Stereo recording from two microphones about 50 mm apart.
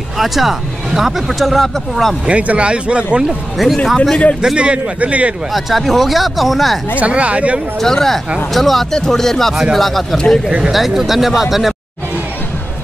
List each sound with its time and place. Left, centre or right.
0.2 s speech: centre
2.2 s speech: right
3.3 s speech: centre
4.6 s speech: right
5.5 s speech: centre
7.0 s speech: right
7.8 s speech: centre
10.7 s speech: centre